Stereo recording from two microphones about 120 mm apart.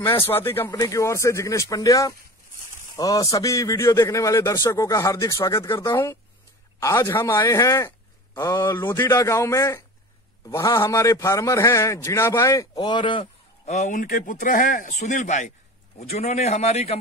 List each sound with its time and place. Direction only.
0.0 s a man's voice: 20° left (ahead or behind)
12.7 s speech: 40° left (ahead or behind)
13.7 s speech: 80° left
16.0 s a man's voice: 65° left (ahead or behind)